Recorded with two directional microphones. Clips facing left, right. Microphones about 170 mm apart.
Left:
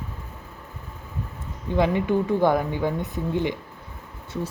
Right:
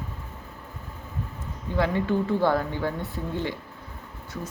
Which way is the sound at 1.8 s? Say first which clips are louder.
Left 3 dB; 15° left (ahead or behind).